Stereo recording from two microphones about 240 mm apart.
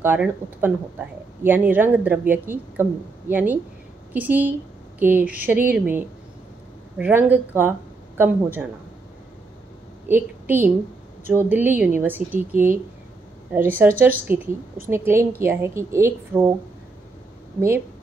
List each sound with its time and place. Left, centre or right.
0.0 s a woman's voice: centre
10.0 s a woman's voice: centre
17.6 s speech: centre